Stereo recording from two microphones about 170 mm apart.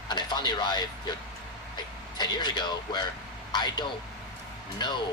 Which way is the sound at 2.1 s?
25° left (ahead or behind).